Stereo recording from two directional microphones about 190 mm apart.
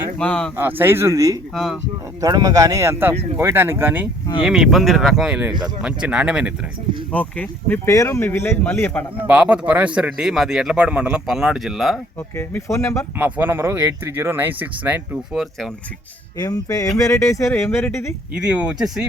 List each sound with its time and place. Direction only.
0.2 s a man's voice: 5° left (ahead or behind)
0.5 s speech: 10° right (ahead or behind)
1.5 s a man's voice: centre (ahead or behind)
2.2 s a man's voice: 20° right (ahead or behind)
7.1 s speech: 5° left (ahead or behind)
9.2 s a man's voice: 5° right (ahead or behind)
12.4 s speech: 15° left (ahead or behind)
13.1 s speech: 10° right (ahead or behind)
16.4 s speech: 20° left (ahead or behind)
18.3 s a man's voice: 5° right (ahead or behind)